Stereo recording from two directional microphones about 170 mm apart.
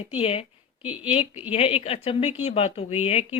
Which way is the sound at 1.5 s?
35° left (ahead or behind).